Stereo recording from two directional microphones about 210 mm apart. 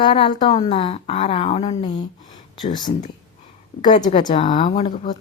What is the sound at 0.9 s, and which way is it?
Speech, 35° left (ahead or behind).